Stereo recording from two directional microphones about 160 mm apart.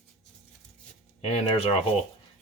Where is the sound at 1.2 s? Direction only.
40° left (ahead or behind).